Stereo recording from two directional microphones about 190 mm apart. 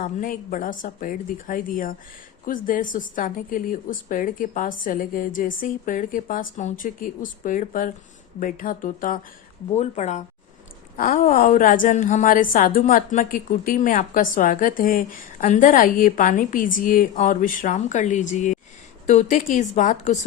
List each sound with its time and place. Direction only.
0.0 s a woman's voice: 45° left (ahead or behind)